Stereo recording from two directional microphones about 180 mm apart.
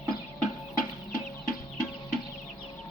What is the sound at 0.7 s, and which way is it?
Chicken, 50° left (ahead or behind).